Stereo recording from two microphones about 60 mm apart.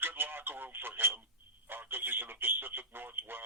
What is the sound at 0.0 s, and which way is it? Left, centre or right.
Radio, right.